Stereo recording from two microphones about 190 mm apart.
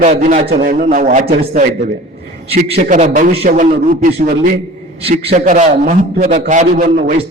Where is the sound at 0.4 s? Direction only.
50° right (ahead or behind).